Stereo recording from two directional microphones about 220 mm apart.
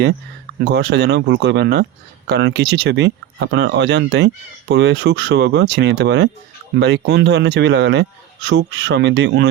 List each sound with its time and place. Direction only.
0.6 s speech: 50° right (ahead or behind)